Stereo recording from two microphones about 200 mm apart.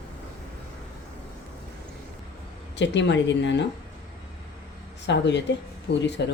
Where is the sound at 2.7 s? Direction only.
65° left (ahead or behind).